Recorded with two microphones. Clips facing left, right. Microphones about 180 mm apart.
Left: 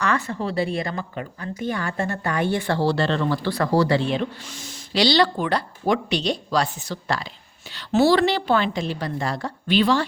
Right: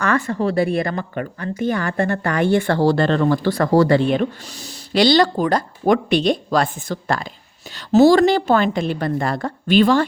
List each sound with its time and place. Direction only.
0.0 s speech: 55° right (ahead or behind); by 2.6 s 85° right
2.6 s a woman's voice: 50° right (ahead or behind)